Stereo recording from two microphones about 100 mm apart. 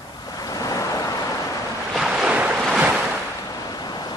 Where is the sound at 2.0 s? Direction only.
5° right (ahead or behind).